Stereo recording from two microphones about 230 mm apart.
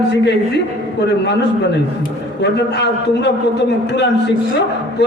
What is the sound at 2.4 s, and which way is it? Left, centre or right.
Speech, left.